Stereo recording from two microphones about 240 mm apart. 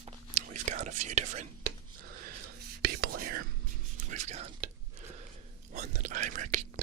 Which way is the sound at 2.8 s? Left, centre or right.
Right.